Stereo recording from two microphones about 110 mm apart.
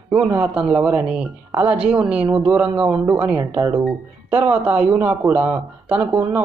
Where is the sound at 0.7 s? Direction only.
10° right (ahead or behind).